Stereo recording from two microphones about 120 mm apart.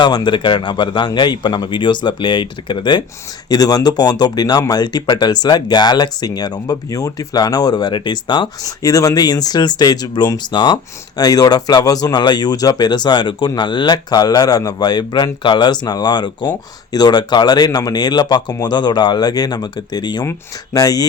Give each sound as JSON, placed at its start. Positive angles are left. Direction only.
{"t": 0.0, "sound": "speech", "side_deg": 40}